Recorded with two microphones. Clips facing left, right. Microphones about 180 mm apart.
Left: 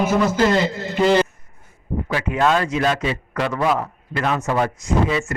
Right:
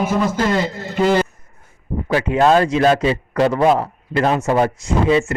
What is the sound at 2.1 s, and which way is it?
A man's voice, 35° right (ahead or behind).